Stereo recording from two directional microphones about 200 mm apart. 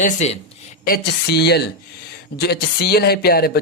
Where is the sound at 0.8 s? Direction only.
50° left (ahead or behind).